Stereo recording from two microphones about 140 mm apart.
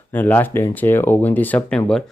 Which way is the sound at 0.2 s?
15° left (ahead or behind).